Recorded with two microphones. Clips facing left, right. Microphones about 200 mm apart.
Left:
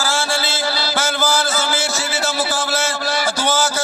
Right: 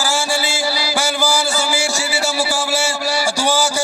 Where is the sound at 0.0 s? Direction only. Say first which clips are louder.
Right 1 dB; 15° right (ahead or behind).